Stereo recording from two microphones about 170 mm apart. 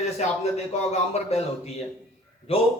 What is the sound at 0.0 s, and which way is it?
A man's voice, 40° left (ahead or behind).